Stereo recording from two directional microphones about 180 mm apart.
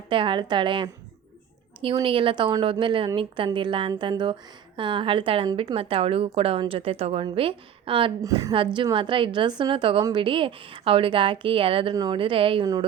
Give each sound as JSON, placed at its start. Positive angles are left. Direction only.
{"t": 0.1, "sound": "a woman's voice", "side_deg": -25}
{"t": 8.2, "sound": "a woman's voice", "side_deg": -20}